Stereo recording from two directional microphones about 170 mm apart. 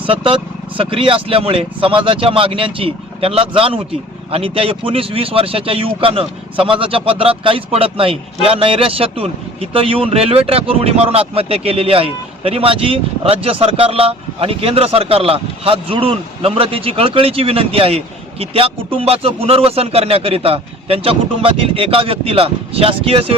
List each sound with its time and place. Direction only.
0.0 s speech: 30° right (ahead or behind)